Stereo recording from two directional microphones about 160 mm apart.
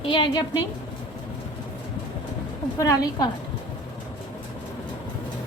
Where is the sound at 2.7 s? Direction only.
20° left (ahead or behind).